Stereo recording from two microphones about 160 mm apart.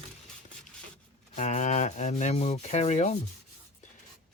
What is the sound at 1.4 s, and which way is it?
Speech, 50° left (ahead or behind).